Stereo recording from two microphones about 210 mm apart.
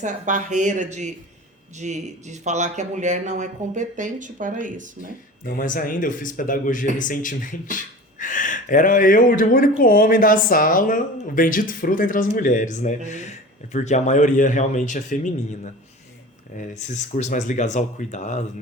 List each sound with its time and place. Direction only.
0.0 s speech: 35° right (ahead or behind)
5.5 s speech: 40° left (ahead or behind)